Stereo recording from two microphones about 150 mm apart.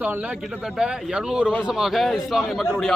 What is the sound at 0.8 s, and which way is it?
A man's voice, 5° right (ahead or behind).